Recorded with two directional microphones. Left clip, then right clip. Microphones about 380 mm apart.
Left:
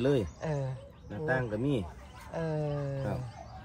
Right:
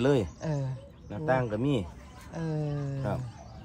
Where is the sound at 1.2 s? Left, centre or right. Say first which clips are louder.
Right 3 dB; centre.